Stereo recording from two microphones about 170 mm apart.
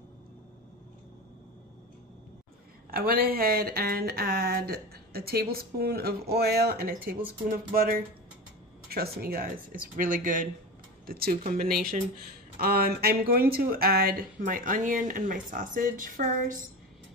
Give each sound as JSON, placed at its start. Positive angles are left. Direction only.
{"t": 2.9, "sound": "speech", "side_deg": -60}